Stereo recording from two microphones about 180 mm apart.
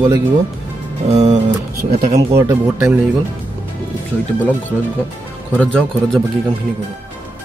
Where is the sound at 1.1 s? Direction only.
40° right (ahead or behind).